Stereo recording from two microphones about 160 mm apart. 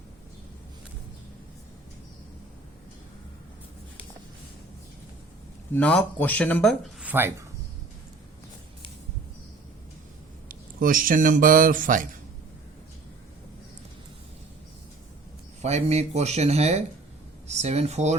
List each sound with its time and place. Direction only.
5.7 s speech: 5° left (ahead or behind)
7.0 s a sound: 10° right (ahead or behind)
10.5 s a man's voice: 60° right (ahead or behind)
15.6 s speech: 45° right (ahead or behind)